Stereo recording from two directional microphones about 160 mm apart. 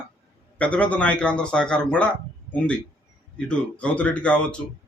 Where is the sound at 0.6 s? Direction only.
10° left (ahead or behind).